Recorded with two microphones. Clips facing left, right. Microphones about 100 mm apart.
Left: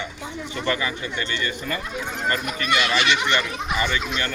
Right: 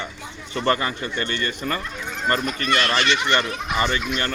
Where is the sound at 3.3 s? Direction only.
40° right (ahead or behind).